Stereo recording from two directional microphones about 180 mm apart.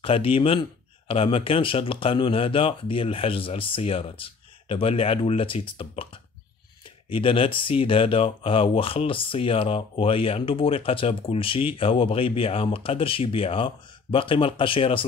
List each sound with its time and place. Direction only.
0.0 s speech: 30° left (ahead or behind)
7.1 s speech: 30° left (ahead or behind)